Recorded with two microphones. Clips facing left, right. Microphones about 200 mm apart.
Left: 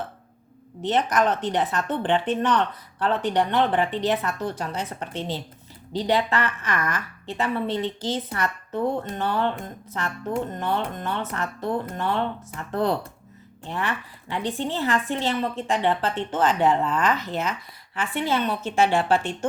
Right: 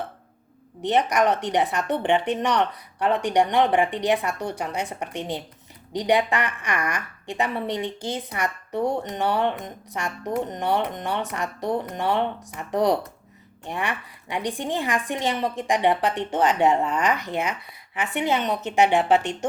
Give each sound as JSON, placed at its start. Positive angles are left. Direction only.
{"t": 0.8, "sound": "a woman's voice", "side_deg": -15}